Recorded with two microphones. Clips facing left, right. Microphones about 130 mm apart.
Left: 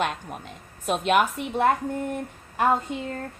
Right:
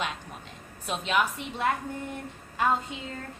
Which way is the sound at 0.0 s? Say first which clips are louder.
Left 6 dB; 55° left (ahead or behind).